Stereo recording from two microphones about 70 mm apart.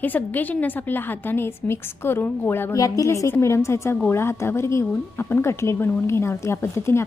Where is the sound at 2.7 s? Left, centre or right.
Left.